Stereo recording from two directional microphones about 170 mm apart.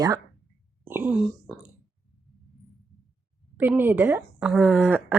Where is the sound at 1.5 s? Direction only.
5° left (ahead or behind).